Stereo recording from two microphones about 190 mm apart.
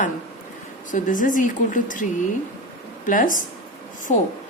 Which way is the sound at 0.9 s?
45° left (ahead or behind).